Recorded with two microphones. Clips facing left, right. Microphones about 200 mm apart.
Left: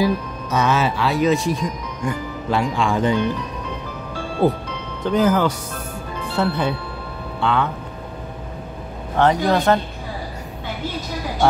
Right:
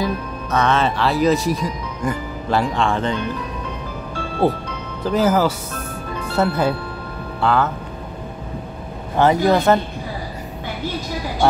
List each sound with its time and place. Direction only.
0.0 s speech: 10° left (ahead or behind)
4.4 s speech: 30° right (ahead or behind)
5.0 s a man's voice: 5° right (ahead or behind)
9.2 s a man's voice: 5° right (ahead or behind)